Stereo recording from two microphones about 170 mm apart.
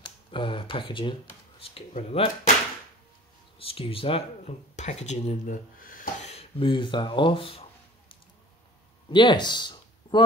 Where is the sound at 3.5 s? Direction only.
35° left (ahead or behind); by 6.3 s 55° left (ahead or behind).